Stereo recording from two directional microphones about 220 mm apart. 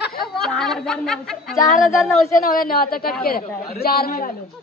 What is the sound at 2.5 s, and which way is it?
A man's voice, 40° left (ahead or behind).